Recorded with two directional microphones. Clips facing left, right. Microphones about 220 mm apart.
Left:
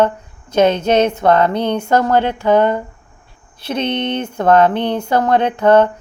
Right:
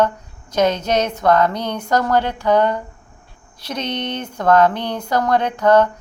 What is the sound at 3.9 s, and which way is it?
Speech, 25° left (ahead or behind).